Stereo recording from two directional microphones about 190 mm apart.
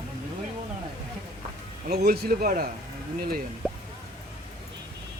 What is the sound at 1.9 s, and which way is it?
A man's voice, 55° right (ahead or behind).